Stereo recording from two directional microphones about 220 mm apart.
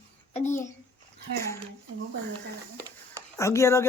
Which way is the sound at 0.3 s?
35° left (ahead or behind).